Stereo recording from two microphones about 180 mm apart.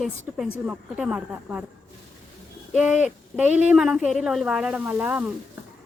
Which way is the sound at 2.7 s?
5° right (ahead or behind).